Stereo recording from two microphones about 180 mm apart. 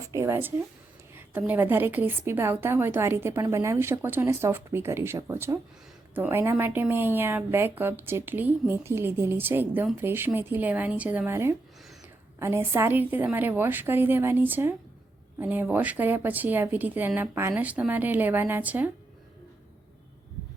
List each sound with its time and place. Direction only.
0.0 s a woman's voice: 15° right (ahead or behind)